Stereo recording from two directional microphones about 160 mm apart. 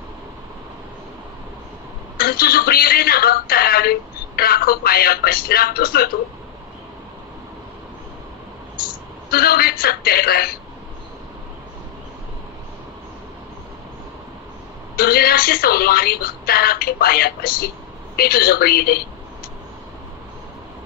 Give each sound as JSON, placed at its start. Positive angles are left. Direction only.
{"t": 2.1, "sound": "speech", "side_deg": 70}
{"t": 8.8, "sound": "a woman's voice", "side_deg": 70}
{"t": 15.0, "sound": "speech", "side_deg": 70}